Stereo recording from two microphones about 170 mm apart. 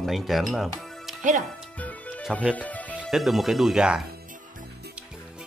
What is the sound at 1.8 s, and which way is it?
Music, 10° left (ahead or behind).